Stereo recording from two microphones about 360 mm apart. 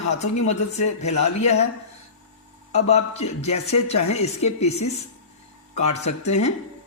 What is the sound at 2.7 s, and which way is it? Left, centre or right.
A man's voice, centre.